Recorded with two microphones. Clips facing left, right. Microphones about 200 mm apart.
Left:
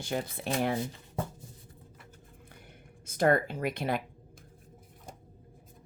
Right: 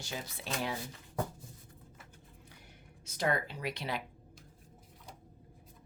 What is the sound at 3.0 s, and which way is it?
Speech, 50° left (ahead or behind).